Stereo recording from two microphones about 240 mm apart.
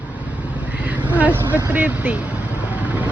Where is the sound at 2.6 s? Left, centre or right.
Centre.